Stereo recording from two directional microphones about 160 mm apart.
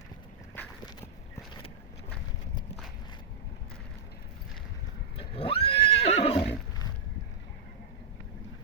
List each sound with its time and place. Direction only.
5.1 s neigh: 35° left (ahead or behind)